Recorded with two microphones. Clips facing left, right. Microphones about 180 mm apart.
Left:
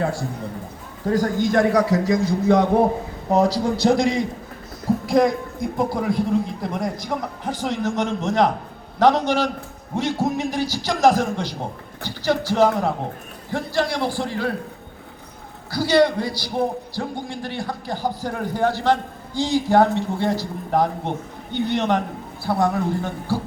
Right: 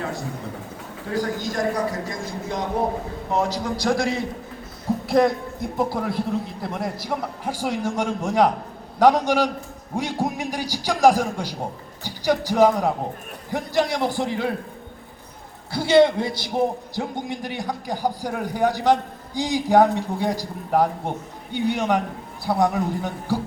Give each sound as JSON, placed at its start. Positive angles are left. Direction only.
{"t": 1.1, "sound": "a man's voice", "side_deg": 50}
{"t": 1.7, "sound": "a man's voice", "side_deg": 80}
{"t": 3.3, "sound": "a man's voice", "side_deg": 35}
{"t": 5.0, "sound": "a man's voice", "side_deg": 0}
{"t": 15.7, "sound": "a man's voice", "side_deg": -25}